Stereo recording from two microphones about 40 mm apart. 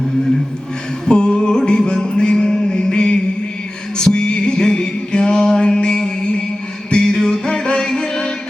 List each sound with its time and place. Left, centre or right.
1.0 s mantra: left
3.9 s music: left